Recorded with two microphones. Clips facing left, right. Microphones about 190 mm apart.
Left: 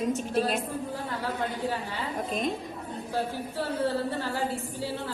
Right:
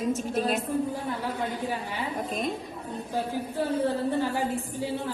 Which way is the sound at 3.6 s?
15° right (ahead or behind).